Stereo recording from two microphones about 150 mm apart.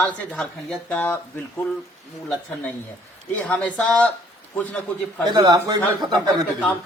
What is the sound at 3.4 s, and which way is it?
Speech, 10° left (ahead or behind).